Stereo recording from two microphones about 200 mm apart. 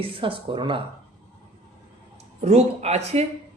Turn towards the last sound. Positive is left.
turn(degrees=-30)  # may be behind; listen again after turning